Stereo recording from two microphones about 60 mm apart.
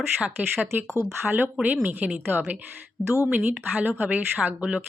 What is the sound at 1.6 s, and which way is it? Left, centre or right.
Speech, right.